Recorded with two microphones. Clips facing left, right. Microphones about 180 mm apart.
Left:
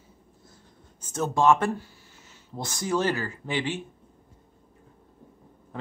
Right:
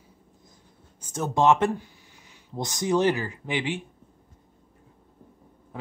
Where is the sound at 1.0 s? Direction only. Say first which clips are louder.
Even; 15° right (ahead or behind).